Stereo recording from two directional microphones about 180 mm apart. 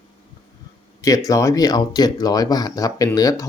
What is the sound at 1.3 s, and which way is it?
Speech, 15° left (ahead or behind).